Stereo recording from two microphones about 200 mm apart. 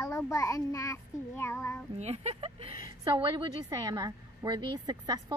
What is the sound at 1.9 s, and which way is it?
A woman's voice, 30° right (ahead or behind).